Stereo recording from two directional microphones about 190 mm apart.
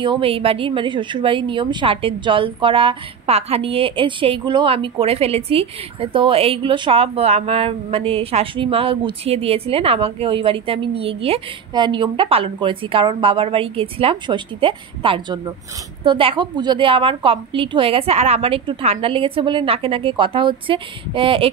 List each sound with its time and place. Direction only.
0.0 s a woman's voice: 25° right (ahead or behind)